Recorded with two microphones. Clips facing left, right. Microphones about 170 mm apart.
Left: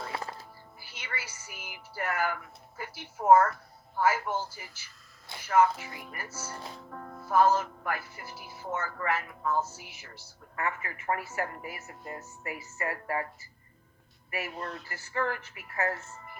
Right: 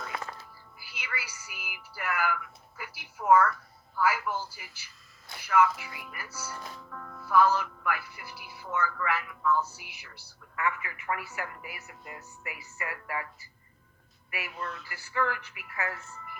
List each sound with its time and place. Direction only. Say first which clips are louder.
0.0 s music: left 1 dB; 30° left (ahead or behind)
5.4 s speech: left 1 dB; 35° left (ahead or behind)
6.6 s speech: left 1 dB; 30° left (ahead or behind)